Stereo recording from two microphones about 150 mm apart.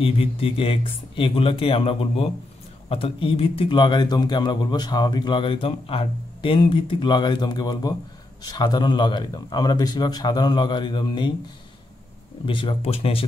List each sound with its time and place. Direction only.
0.0 s a man's voice: 40° left (ahead or behind)
12.4 s a man's voice: 35° left (ahead or behind)